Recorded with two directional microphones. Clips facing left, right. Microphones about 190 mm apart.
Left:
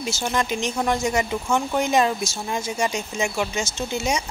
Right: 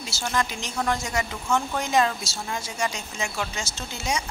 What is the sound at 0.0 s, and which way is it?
Speech, 20° left (ahead or behind).